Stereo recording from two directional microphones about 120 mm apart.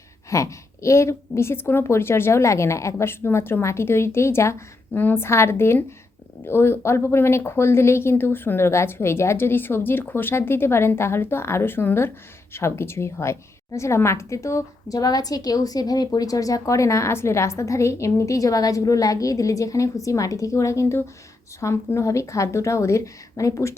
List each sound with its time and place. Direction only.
0.3 s a woman's voice: 25° left (ahead or behind)